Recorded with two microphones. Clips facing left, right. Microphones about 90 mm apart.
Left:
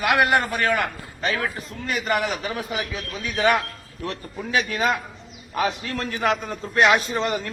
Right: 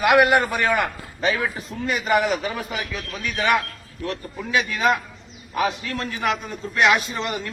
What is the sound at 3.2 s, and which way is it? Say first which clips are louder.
A man's voice: left 1 dB; 30° left (ahead or behind).